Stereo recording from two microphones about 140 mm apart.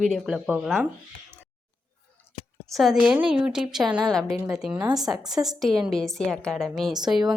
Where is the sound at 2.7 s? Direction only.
5° right (ahead or behind).